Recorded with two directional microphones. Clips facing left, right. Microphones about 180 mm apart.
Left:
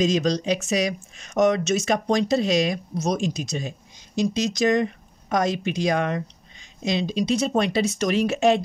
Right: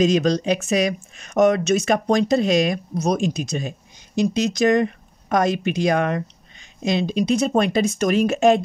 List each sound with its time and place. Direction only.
0.0 s speech: 60° right (ahead or behind)